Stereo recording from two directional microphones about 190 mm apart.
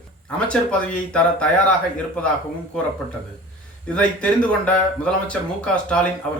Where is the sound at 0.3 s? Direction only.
5° left (ahead or behind).